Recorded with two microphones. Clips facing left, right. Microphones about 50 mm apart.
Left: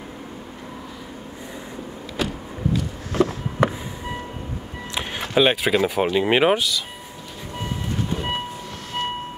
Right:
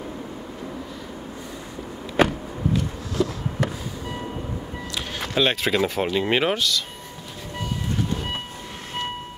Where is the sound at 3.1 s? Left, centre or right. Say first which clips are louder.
Left 6 dB; left.